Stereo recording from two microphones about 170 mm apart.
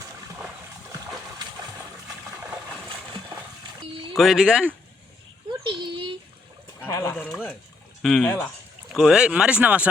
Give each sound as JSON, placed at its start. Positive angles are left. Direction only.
{"t": 4.2, "sound": "speech", "side_deg": -5}
{"t": 5.6, "sound": "a sound", "side_deg": -30}
{"t": 6.8, "sound": "speech", "side_deg": 15}
{"t": 7.3, "sound": "speech", "side_deg": 5}